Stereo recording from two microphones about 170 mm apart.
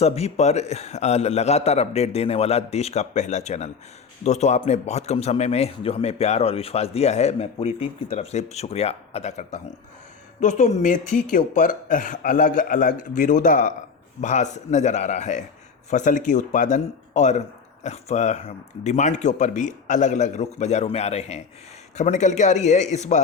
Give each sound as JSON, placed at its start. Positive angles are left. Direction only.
{"t": 0.0, "sound": "a man's voice", "side_deg": 40}